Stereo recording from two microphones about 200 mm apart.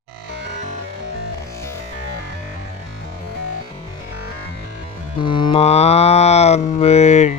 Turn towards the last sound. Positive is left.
turn(degrees=35)  # may be behind; listen again after turning